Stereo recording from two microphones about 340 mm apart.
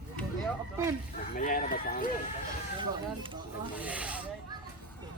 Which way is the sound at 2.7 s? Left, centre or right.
Centre.